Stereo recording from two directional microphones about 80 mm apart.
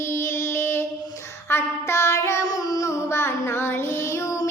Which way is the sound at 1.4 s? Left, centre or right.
Left.